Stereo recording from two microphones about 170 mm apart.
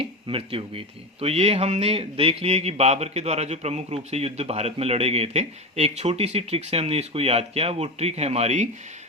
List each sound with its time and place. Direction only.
0.0 s speech: 30° right (ahead or behind)